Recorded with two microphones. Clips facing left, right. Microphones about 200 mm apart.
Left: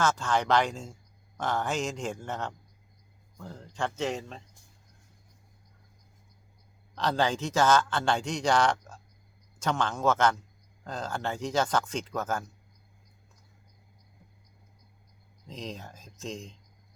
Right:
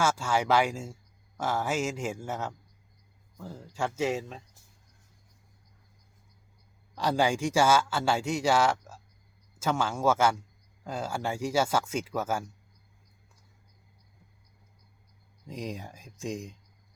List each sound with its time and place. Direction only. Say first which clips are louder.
0.0 s a man's voice: even; 10° right (ahead or behind)
6.9 s a man's voice: right 1 dB; 10° right (ahead or behind)
15.4 s a man's voice: right 3 dB; 15° right (ahead or behind)